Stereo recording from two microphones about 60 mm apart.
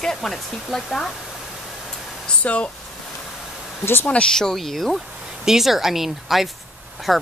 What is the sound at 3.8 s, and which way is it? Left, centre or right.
Speech, left.